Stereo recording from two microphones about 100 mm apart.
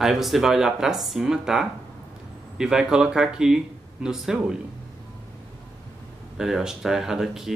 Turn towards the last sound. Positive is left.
turn(degrees=-5)  # may be behind; listen again after turning